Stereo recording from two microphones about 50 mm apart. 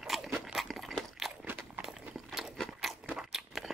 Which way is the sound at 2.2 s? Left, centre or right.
Centre.